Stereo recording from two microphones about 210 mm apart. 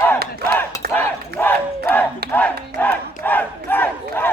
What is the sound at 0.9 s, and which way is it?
Battle cry, 10° left (ahead or behind).